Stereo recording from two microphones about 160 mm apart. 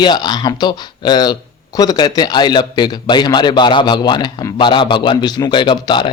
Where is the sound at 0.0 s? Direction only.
25° left (ahead or behind).